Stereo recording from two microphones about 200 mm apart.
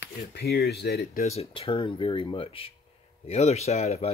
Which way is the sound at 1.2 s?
30° left (ahead or behind).